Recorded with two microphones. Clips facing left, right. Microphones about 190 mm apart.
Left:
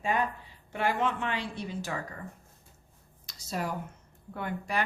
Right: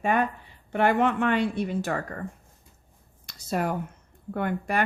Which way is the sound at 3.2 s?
55° right (ahead or behind).